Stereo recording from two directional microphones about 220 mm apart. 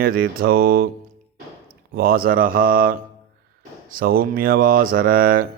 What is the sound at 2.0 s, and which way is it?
Speech, 40° right (ahead or behind).